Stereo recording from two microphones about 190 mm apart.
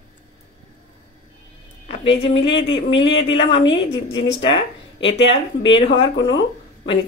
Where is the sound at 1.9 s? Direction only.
30° left (ahead or behind).